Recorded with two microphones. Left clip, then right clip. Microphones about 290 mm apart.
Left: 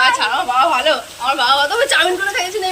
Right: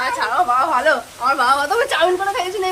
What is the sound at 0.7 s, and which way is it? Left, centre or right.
A woman's voice, centre.